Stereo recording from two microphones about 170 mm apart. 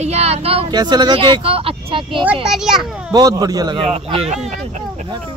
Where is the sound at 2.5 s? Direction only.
Centre (ahead or behind).